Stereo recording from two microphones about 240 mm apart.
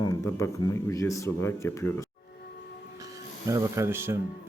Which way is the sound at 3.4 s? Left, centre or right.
Centre.